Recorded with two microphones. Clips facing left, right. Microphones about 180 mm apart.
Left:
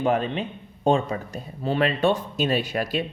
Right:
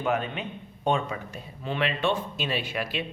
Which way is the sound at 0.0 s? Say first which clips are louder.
Left 5 dB; 35° left (ahead or behind).